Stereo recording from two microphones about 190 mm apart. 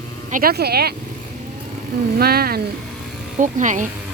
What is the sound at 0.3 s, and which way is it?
Speech, 45° right (ahead or behind).